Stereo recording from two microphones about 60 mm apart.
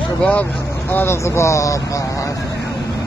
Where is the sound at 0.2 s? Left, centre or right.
Left.